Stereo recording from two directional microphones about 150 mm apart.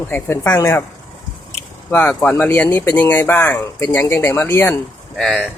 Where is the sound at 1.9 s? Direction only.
15° left (ahead or behind).